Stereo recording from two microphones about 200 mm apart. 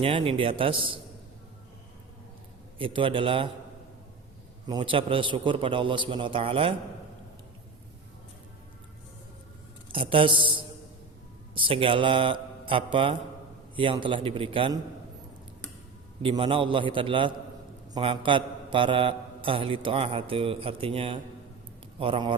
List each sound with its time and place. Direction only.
0.0 s a man's voice: 25° right (ahead or behind)
2.7 s a man's voice: 25° right (ahead or behind)
4.6 s a man's voice: 25° right (ahead or behind)
9.9 s a man's voice: 25° right (ahead or behind)
11.5 s a man's voice: 25° right (ahead or behind)
16.2 s a man's voice: 25° right (ahead or behind)